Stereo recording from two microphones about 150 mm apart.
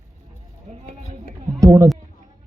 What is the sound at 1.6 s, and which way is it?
Speech, 25° right (ahead or behind).